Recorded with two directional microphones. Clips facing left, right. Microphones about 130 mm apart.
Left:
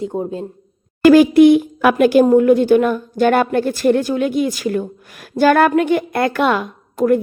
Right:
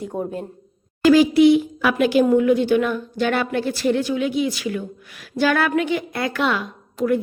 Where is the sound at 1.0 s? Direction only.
55° left (ahead or behind).